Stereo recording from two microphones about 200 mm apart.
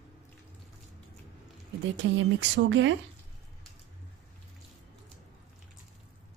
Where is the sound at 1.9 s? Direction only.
65° right (ahead or behind).